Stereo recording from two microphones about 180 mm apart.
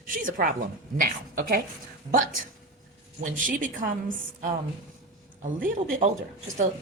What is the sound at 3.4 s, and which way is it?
Speech, 45° right (ahead or behind).